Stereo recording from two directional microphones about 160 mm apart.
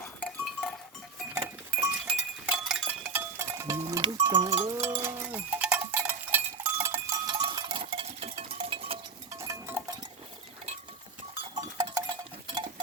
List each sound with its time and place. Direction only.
0.0 s goat: 5° left (ahead or behind)
1.3 s goat: 15° right (ahead or behind)
2.0 s music: 5° right (ahead or behind)
3.8 s speech: 25° right (ahead or behind)
4.9 s cowbell: 15° right (ahead or behind); by 9.0 s 35° right (ahead or behind)
9.3 s a sound: 20° right (ahead or behind)
11.5 s cowbell: 30° right (ahead or behind)